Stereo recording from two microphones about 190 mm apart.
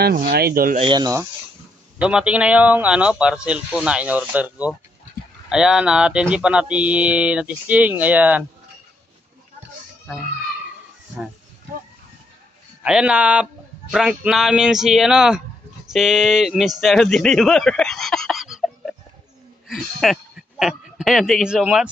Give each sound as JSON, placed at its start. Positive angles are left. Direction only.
{"t": 0.0, "sound": "speech", "side_deg": -55}
{"t": 0.7, "sound": "speech", "side_deg": -25}
{"t": 2.0, "sound": "a man's voice", "side_deg": -5}
{"t": 12.8, "sound": "speech", "side_deg": -5}